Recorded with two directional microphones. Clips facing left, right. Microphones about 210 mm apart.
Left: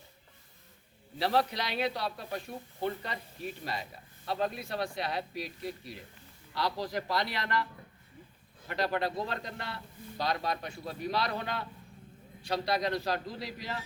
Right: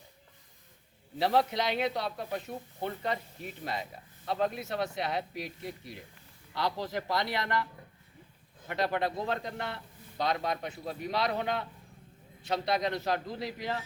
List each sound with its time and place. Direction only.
1.2 s a man's voice: 20° right (ahead or behind)
8.6 s a man's voice: 20° right (ahead or behind)